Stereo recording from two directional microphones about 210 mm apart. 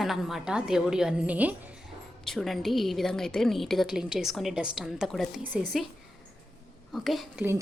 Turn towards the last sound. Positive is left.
turn(degrees=0)  # may be behind; listen again after turning